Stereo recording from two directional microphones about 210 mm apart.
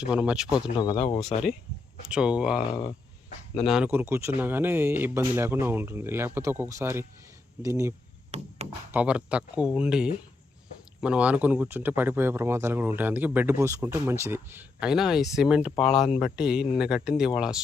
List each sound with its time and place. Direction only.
0.0 s speech: 5° right (ahead or behind)
0.8 s speech: 30° left (ahead or behind)
2.0 s speech: 5° right (ahead or behind)
3.7 s speech: 5° right (ahead or behind)
8.3 s speech: 30° right (ahead or behind)
8.9 s speech: 5° right (ahead or behind)